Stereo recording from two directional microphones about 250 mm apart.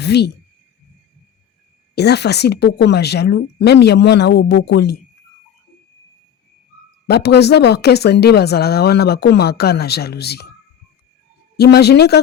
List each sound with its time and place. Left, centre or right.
0.0 s speech: left
2.0 s speech: left
7.1 s speech: left
11.5 s speech: left